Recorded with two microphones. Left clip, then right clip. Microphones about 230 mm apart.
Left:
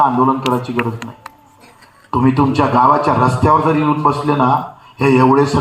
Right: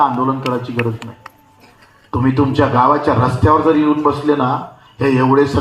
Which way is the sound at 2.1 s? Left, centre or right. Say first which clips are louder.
Left 2 dB; left.